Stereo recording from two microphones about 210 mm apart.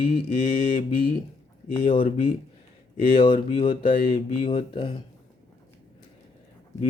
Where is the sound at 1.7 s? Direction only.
25° left (ahead or behind).